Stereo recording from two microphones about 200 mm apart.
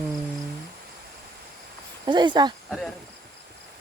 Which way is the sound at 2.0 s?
20° right (ahead or behind).